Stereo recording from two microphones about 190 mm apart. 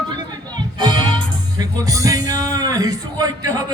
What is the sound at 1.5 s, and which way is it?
A man's voice, 20° right (ahead or behind).